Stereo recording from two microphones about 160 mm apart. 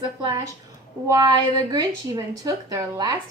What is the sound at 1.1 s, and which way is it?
A woman's voice, 25° right (ahead or behind).